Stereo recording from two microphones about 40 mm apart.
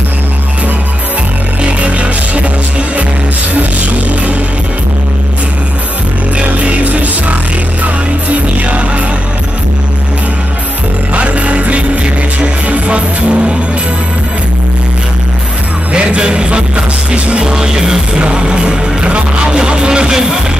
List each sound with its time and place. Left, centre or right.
1.6 s music: right
6.5 s music: right
11.1 s music: right
15.9 s music: right